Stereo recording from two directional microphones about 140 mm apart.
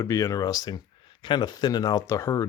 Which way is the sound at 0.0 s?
20° left (ahead or behind).